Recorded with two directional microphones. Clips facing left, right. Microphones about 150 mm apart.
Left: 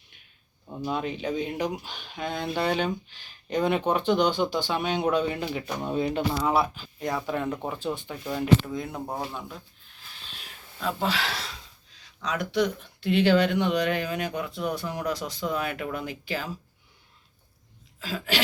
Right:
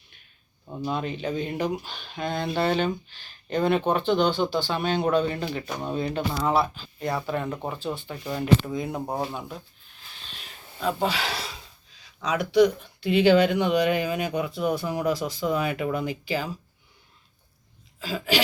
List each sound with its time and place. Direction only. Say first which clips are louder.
0.9 s speech: even; 5° left (ahead or behind)
6.4 s speech: right 1 dB; centre (ahead or behind)
8.9 s speech: right 4 dB; 15° right (ahead or behind)
10.2 s a sound: right 2 dB; 5° left (ahead or behind)
12.2 s speech: right 6 dB; 5° right (ahead or behind)
18.0 s speech: right 3 dB; centre (ahead or behind)